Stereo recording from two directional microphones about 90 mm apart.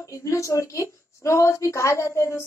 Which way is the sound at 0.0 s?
35° left (ahead or behind).